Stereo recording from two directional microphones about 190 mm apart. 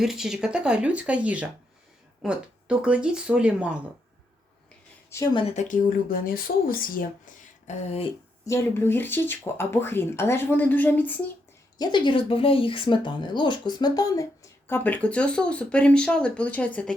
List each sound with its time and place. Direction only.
0.0 s speech: centre (ahead or behind)
5.1 s speech: 20° left (ahead or behind)
5.5 s speech: 40° left (ahead or behind)
8.4 s speech: 15° left (ahead or behind)
11.8 s speech: 25° left (ahead or behind); by 16.9 s 5° left (ahead or behind)